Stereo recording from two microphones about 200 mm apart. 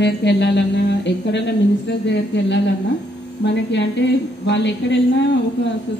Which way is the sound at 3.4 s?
60° left (ahead or behind).